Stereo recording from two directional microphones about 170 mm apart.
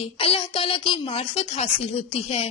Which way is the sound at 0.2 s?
35° left (ahead or behind).